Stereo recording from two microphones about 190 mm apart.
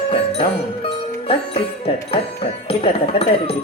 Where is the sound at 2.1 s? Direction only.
30° left (ahead or behind).